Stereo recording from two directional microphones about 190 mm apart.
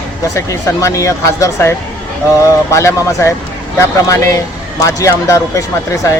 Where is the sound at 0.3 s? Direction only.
15° left (ahead or behind).